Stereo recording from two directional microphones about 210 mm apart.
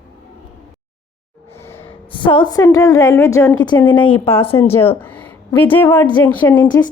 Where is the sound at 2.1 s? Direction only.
25° left (ahead or behind).